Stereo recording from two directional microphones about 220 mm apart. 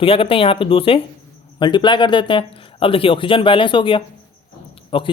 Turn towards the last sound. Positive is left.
turn(degrees=25)  # may be behind; listen again after turning